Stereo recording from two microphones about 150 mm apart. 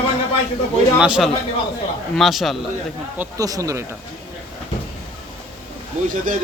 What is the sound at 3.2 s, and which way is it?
Speech, 20° right (ahead or behind).